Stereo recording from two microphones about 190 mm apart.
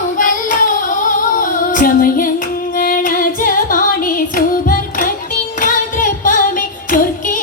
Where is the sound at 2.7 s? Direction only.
50° left (ahead or behind).